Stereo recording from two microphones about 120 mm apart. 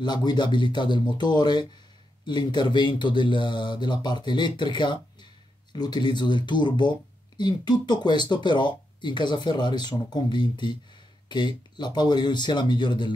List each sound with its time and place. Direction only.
0.0 s speech: 35° left (ahead or behind)